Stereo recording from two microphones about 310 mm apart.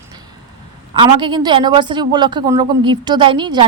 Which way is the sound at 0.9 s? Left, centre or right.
Centre.